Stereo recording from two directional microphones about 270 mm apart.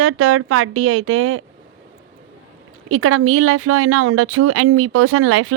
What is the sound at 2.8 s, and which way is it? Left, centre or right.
Speech, right.